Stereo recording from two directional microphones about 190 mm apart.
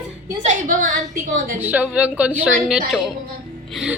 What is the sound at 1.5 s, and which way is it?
A woman's voice, 10° right (ahead or behind).